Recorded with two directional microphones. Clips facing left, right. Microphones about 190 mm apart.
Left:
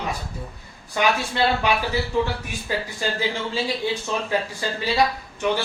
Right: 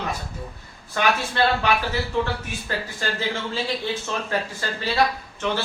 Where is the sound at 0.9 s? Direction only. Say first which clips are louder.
Even; 15° left (ahead or behind).